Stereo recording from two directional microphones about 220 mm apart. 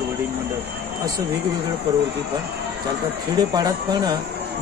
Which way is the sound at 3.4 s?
15° right (ahead or behind).